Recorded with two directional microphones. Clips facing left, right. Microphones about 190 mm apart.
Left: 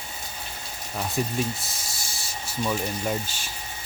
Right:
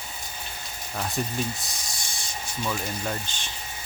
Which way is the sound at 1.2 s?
5° left (ahead or behind).